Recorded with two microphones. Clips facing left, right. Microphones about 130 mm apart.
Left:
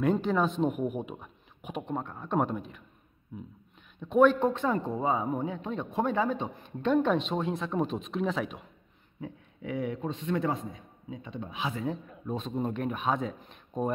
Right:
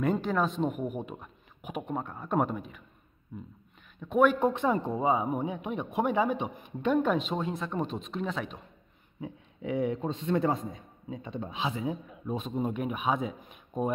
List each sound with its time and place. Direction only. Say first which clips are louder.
0.0 s a man's voice: left 1 dB; centre (ahead or behind)
9.2 s a man's voice: right 2 dB; 25° right (ahead or behind)
11.6 s a man's voice: even; 15° right (ahead or behind)